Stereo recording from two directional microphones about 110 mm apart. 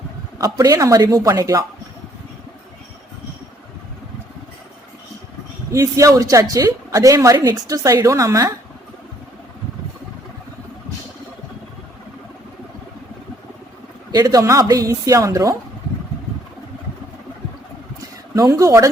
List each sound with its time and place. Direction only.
0.3 s a woman's voice: 35° right (ahead or behind)
5.7 s a woman's voice: 30° right (ahead or behind)
14.1 s a woman's voice: 35° right (ahead or behind)
18.3 s a woman's voice: 30° right (ahead or behind)